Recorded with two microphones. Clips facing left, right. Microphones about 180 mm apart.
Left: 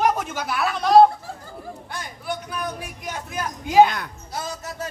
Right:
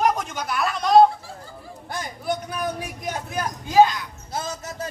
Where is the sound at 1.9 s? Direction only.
40° right (ahead or behind).